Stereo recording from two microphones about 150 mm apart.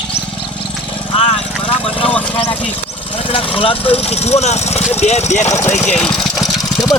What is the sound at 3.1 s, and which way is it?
Speech, 35° left (ahead or behind).